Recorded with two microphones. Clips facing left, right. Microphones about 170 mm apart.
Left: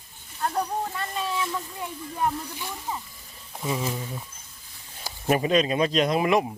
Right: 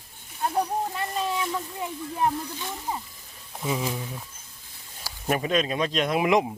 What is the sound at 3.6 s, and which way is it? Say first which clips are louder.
Speech: even; centre (ahead or behind).